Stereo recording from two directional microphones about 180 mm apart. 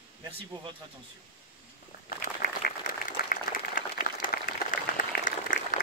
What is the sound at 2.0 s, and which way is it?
Applause, 50° left (ahead or behind).